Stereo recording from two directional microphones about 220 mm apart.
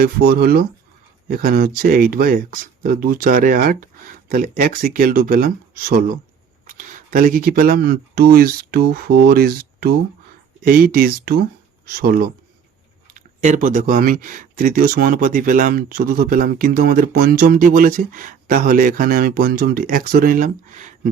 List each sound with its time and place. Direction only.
0.0 s speech: 45° right (ahead or behind)